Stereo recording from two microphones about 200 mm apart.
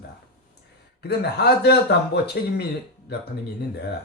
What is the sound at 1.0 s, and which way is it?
Speech, 55° left (ahead or behind).